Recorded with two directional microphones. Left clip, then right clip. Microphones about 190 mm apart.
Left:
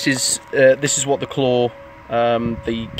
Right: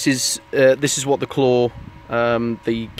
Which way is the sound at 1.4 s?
45° right (ahead or behind).